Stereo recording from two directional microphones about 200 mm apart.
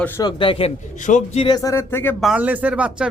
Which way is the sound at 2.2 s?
5° right (ahead or behind).